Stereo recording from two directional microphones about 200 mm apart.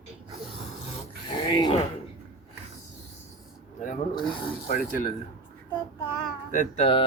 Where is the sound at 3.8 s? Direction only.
40° left (ahead or behind).